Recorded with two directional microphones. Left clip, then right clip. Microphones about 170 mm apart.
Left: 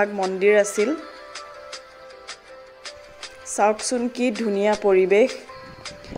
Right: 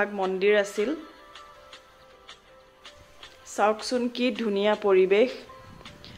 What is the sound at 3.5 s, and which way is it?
Speech, 30° left (ahead or behind).